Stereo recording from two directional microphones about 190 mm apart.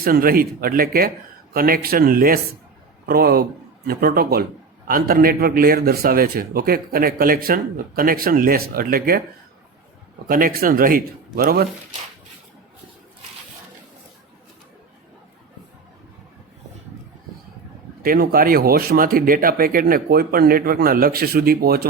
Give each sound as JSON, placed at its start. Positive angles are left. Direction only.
{"t": 0.0, "sound": "a man's voice", "side_deg": -50}
{"t": 10.2, "sound": "a man's voice", "side_deg": -50}
{"t": 18.0, "sound": "a man's voice", "side_deg": -50}